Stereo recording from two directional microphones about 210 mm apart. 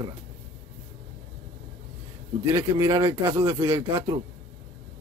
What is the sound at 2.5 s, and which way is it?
Speech, 15° right (ahead or behind).